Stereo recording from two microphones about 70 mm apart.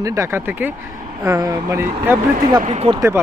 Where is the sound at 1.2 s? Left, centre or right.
Right.